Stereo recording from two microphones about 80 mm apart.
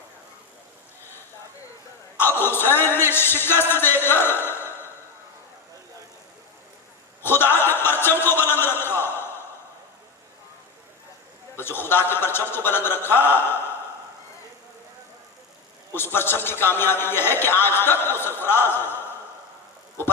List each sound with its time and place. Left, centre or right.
2.1 s speech: left
7.2 s a sound: left
11.5 s a man's voice: left
16.0 s a man's voice: left